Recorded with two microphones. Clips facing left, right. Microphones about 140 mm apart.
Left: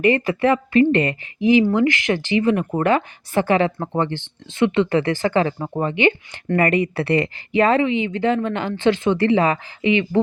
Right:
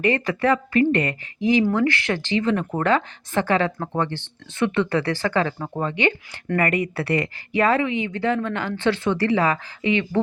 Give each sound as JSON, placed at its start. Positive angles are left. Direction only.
{"t": 0.0, "sound": "speech", "side_deg": 15}